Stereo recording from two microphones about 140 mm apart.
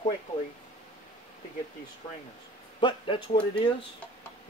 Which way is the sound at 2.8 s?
35° left (ahead or behind).